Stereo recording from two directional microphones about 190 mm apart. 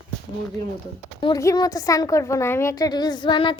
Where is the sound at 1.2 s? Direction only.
20° left (ahead or behind).